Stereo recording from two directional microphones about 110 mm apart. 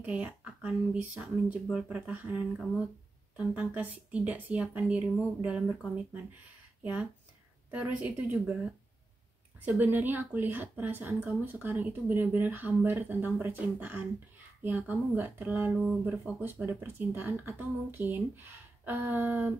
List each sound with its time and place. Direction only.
0.0 s speech: 10° right (ahead or behind)
3.3 s speech: 15° right (ahead or behind)
6.8 s speech: 15° right (ahead or behind)
9.7 s speech: 15° right (ahead or behind)